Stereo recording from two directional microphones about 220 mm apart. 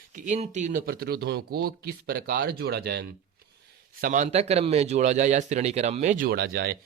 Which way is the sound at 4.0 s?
35° right (ahead or behind).